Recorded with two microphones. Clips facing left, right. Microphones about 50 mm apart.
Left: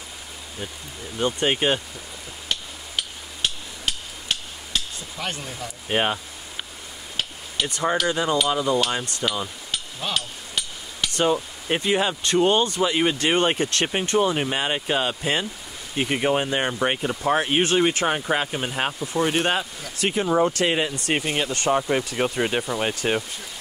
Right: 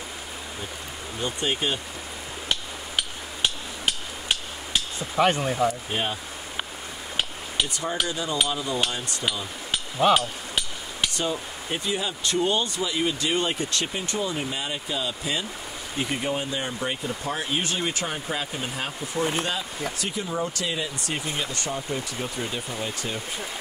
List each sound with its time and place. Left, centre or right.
1.2 s speech: left
3.4 s hammer: centre
5.2 s speech: right
5.9 s speech: left
7.6 s speech: left
10.1 s hammer: centre
11.7 s speech: left